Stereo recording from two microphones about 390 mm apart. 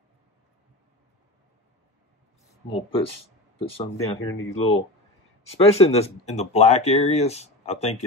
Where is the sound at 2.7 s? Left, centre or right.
Centre.